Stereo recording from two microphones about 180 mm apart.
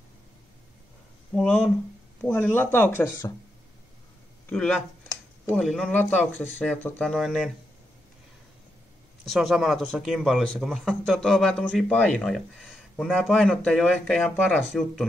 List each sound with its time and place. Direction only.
1.3 s speech: centre (ahead or behind)
4.5 s speech: 5° left (ahead or behind)
9.2 s speech: centre (ahead or behind)